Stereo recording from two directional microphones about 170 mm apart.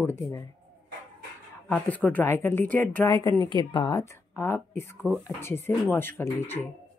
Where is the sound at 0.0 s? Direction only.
20° left (ahead or behind).